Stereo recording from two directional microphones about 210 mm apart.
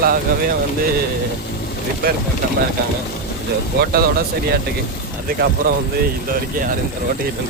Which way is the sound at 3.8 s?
45° right (ahead or behind).